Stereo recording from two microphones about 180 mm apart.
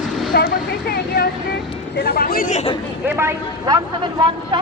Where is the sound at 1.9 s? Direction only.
65° left (ahead or behind); by 2.7 s 45° left (ahead or behind).